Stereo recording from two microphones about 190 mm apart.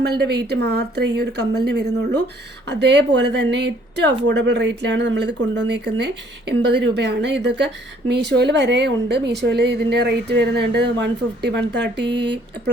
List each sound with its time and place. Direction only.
0.0 s speech: 60° right (ahead or behind)